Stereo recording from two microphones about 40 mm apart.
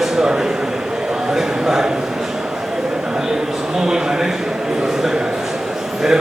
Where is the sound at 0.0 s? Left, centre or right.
Centre.